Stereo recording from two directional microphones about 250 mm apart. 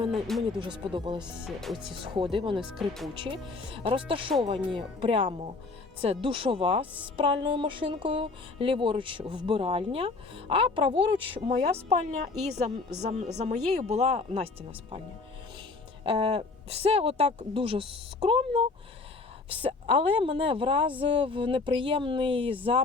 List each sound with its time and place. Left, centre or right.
0.1 s speech: centre
0.6 s speech: centre
2.3 s speech: centre
2.6 s speech: centre
3.2 s speech: right
16.0 s speech: centre